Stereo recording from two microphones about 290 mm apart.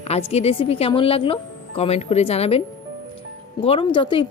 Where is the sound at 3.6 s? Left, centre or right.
Centre.